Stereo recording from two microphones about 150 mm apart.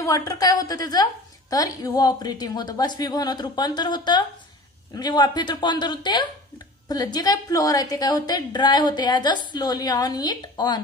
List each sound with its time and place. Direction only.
0.0 s a woman's voice: 20° left (ahead or behind)